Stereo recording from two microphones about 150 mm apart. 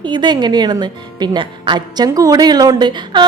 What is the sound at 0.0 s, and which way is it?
A woman's voice, 30° right (ahead or behind).